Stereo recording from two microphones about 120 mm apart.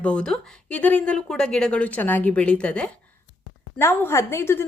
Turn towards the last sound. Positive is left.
turn(degrees=20)  # may be behind; listen again after turning